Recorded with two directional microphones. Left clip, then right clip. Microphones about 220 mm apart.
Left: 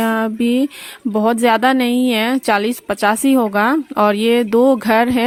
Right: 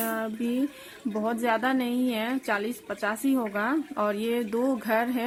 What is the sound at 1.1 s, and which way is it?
Speech, 45° left (ahead or behind).